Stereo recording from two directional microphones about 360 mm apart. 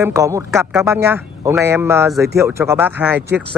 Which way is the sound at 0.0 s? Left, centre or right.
Centre.